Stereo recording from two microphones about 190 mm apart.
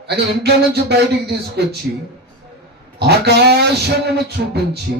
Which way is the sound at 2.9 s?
60° right (ahead or behind).